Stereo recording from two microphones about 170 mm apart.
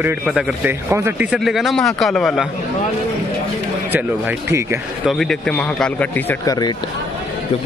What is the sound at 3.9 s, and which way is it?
Speech, 15° right (ahead or behind).